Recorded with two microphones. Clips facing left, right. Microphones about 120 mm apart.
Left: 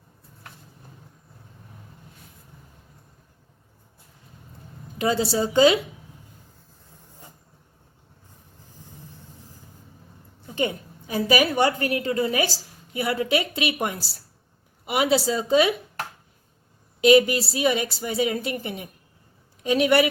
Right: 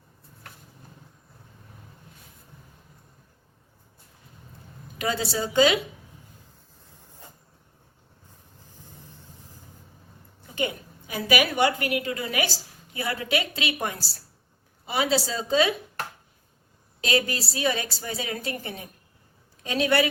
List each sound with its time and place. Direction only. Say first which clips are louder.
4.9 s a woman's voice: left 5 dB; 25° left (ahead or behind)
10.5 s a woman's voice: left 3 dB; 30° left (ahead or behind)
17.0 s a woman's voice: left 10 dB; 20° left (ahead or behind)